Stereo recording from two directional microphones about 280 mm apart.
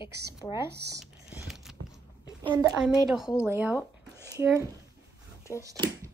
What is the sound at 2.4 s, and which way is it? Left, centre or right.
Speech, centre.